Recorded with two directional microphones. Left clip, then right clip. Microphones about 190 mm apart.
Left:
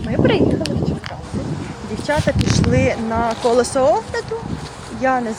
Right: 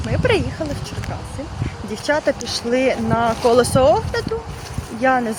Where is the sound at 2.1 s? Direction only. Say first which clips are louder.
Even; 10° right (ahead or behind).